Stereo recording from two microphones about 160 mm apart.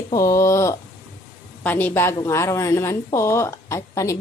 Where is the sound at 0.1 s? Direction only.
20° left (ahead or behind).